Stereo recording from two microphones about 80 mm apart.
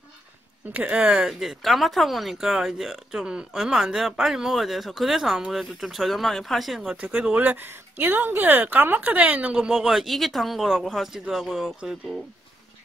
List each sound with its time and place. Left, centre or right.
0.7 s speech: centre
1.4 s speech: centre